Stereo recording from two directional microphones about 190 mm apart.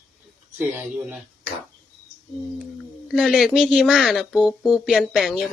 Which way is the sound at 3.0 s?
Centre (ahead or behind).